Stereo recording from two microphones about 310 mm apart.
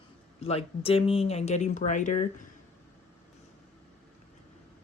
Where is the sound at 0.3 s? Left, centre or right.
Centre.